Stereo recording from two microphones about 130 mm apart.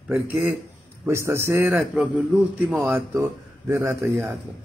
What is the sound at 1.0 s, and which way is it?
A man's voice, 20° right (ahead or behind).